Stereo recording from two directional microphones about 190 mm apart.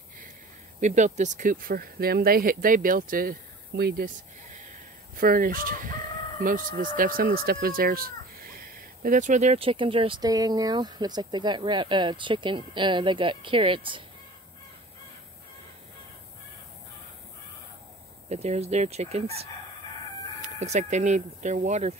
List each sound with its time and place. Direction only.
0.7 s speech: 40° right (ahead or behind)
5.1 s speech: 50° right (ahead or behind); by 14.0 s 25° right (ahead or behind)
18.3 s speech: 35° right (ahead or behind)
20.4 s speech: 35° right (ahead or behind)